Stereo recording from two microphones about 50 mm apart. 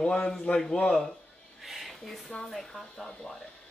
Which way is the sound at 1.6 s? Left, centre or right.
Centre.